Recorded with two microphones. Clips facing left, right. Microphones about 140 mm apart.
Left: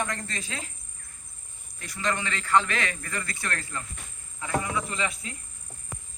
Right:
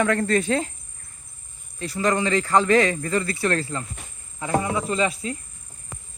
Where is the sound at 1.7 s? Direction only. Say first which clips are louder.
Right 8 dB; 35° right (ahead or behind).